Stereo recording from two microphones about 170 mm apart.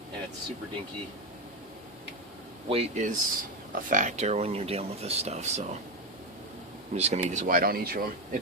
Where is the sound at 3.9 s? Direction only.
50° right (ahead or behind).